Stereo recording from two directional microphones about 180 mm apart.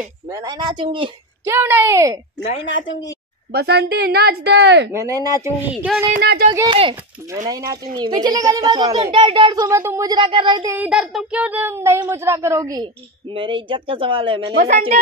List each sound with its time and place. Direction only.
0.3 s a child's voice: 20° right (ahead or behind)
1.4 s a child's voice: 15° right (ahead or behind)
3.5 s a woman's voice: 60° right (ahead or behind)
4.9 s a child's voice: 20° right (ahead or behind)
6.1 s a woman's voice: 60° right (ahead or behind)
6.7 s a child's voice: 30° right (ahead or behind)
10.7 s a child's voice: 5° right (ahead or behind); by 14.7 s 30° right (ahead or behind)
14.7 s a woman's voice: 50° right (ahead or behind)